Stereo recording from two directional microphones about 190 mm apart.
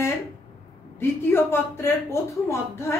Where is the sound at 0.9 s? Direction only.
10° left (ahead or behind).